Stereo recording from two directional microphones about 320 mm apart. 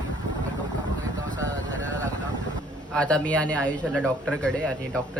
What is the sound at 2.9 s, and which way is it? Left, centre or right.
Speech, centre.